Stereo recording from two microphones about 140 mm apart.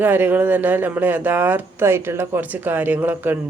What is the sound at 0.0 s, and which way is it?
Speech, 15° right (ahead or behind).